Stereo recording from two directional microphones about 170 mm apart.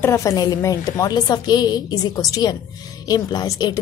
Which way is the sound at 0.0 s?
15° left (ahead or behind).